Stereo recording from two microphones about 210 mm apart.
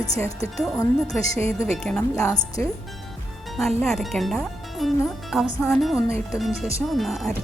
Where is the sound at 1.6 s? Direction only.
5° left (ahead or behind).